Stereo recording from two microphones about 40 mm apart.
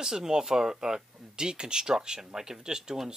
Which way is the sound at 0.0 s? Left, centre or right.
Centre.